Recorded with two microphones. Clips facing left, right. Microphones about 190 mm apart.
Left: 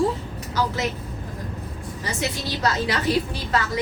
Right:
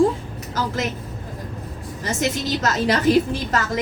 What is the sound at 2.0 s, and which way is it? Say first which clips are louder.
Speech: right 5 dB; 45° right (ahead or behind).